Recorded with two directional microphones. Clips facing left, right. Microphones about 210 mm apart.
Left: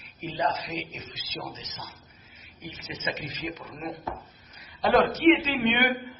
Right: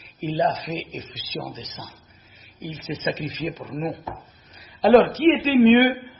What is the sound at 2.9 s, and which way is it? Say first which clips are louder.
Speech: right 10 dB; 35° right (ahead or behind).